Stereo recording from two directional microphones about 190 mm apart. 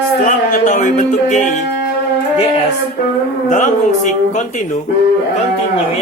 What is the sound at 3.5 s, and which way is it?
Music, 40° left (ahead or behind).